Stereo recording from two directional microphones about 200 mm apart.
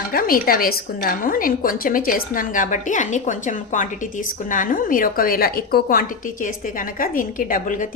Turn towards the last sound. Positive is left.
turn(degrees=40)  # may be behind; listen again after turning